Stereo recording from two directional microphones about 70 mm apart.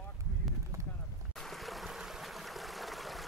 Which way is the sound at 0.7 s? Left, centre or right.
Right.